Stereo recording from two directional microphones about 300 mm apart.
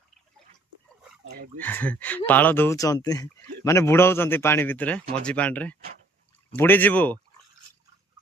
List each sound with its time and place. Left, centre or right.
1.2 s speech: right
1.5 s speech: centre